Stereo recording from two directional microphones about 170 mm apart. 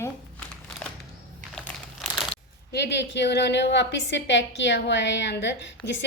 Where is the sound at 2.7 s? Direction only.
85° left.